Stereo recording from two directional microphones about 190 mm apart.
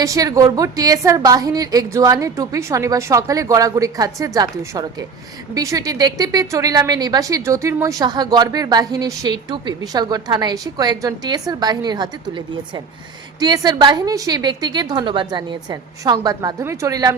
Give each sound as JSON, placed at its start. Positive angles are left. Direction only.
{"t": 0.0, "sound": "a woman's voice", "side_deg": -20}